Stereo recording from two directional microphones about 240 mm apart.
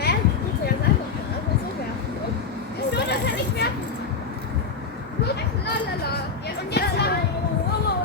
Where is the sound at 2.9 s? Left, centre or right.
Left.